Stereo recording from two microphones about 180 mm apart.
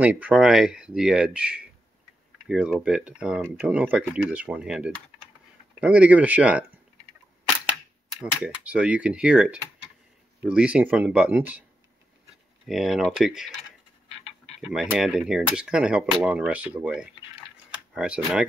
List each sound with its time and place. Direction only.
0.0 s speech: 10° right (ahead or behind)
8.6 s speech: 5° right (ahead or behind)
12.6 s speech: centre (ahead or behind)
14.0 s frog: 35° left (ahead or behind)
14.6 s speech: centre (ahead or behind)